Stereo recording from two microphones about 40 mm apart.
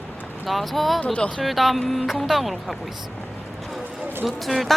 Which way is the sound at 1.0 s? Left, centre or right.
Left.